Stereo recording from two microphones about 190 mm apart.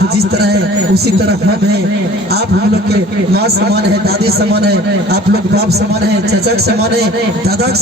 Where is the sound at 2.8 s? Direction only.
55° right (ahead or behind).